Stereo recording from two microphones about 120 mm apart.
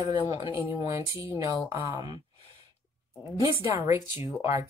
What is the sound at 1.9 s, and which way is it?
Speech, 35° right (ahead or behind).